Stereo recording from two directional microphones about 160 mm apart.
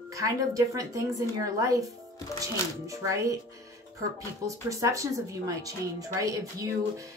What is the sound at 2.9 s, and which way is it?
Speech, 20° right (ahead or behind).